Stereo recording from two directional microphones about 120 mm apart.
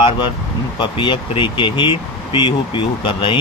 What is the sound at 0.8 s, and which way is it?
A man's voice, 40° left (ahead or behind).